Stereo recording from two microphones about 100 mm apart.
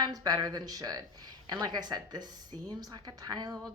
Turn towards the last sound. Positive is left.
turn(degrees=-40)  # may be behind; listen again after turning